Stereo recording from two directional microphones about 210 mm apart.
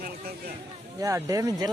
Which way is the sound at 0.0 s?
45° right (ahead or behind).